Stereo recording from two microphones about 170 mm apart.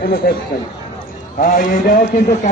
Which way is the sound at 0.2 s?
65° left (ahead or behind).